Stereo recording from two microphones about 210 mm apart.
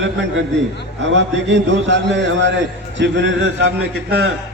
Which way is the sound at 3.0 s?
60° right (ahead or behind).